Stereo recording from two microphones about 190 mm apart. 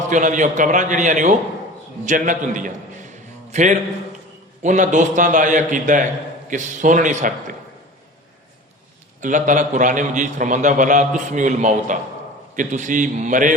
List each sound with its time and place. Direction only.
0.1 s a man's voice: 40° right (ahead or behind)
9.2 s a man's voice: 40° right (ahead or behind)